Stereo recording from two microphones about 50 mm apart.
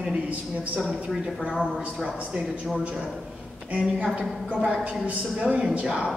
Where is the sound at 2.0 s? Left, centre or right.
Right.